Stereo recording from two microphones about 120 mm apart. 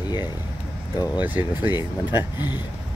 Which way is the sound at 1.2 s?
15° right (ahead or behind).